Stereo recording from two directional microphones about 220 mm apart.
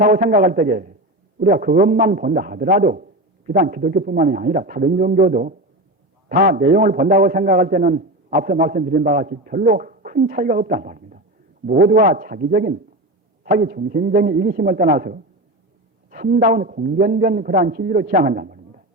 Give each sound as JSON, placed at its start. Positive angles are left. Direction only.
{"t": 0.0, "sound": "a man's voice", "side_deg": -40}